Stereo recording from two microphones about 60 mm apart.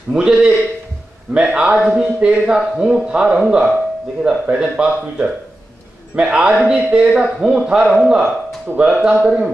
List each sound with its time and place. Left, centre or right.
0.1 s speech: centre